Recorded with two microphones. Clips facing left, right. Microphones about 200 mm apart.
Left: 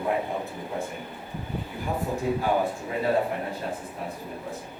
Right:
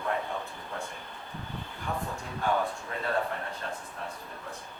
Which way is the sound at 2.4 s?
15° left (ahead or behind).